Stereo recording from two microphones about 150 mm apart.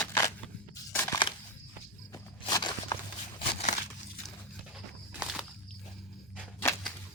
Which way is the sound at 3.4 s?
45° left (ahead or behind).